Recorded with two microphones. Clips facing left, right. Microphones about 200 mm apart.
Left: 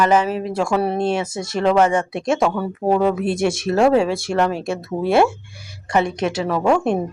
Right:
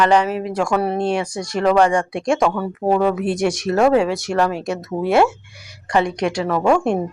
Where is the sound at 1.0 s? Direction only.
25° left (ahead or behind).